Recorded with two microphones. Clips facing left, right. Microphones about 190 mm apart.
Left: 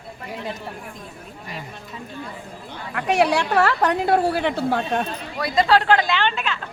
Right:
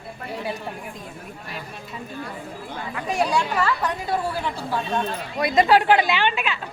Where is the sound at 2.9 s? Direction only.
70° left (ahead or behind).